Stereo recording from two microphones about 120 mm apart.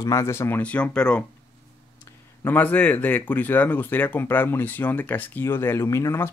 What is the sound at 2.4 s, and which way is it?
Speech, 15° left (ahead or behind).